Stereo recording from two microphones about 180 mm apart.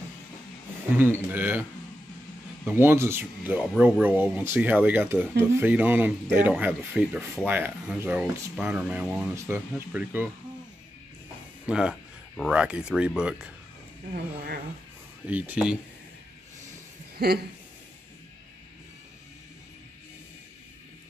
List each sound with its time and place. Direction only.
0.9 s speech: 10° right (ahead or behind)
2.6 s speech: 10° right (ahead or behind)
11.6 s speech: 5° right (ahead or behind)
14.1 s speech: 65° right (ahead or behind)
15.2 s speech: 10° right (ahead or behind)
17.2 s speech: 65° right (ahead or behind)